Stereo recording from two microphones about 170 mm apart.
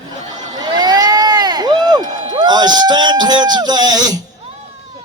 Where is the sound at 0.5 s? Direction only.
25° right (ahead or behind).